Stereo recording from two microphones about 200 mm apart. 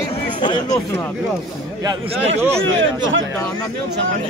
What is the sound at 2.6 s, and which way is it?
Speech, 75° right (ahead or behind).